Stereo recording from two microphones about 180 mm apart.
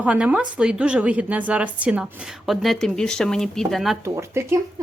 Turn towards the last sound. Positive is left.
turn(degrees=-15)  # may be behind; listen again after turning